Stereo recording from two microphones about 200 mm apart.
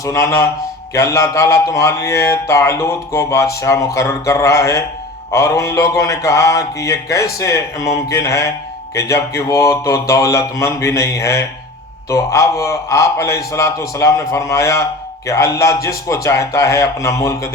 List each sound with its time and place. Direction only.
0.0 s speech: 15° left (ahead or behind)